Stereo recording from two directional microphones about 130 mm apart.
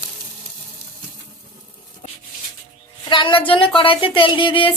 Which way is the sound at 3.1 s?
40° left (ahead or behind).